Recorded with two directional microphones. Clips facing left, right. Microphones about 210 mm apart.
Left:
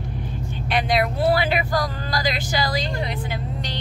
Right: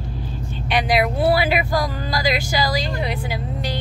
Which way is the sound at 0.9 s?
10° right (ahead or behind).